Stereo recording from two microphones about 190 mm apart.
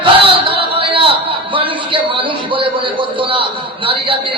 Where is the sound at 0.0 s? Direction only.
30° right (ahead or behind).